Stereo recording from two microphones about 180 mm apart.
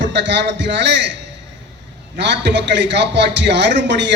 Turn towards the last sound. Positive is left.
turn(degrees=-75)  # may be behind; listen again after turning